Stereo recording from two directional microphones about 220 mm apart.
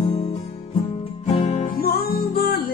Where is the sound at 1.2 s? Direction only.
30° left (ahead or behind).